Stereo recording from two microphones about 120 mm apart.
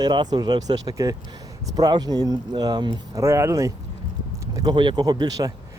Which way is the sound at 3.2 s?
25° right (ahead or behind).